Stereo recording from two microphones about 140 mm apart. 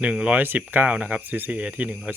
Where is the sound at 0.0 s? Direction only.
10° right (ahead or behind).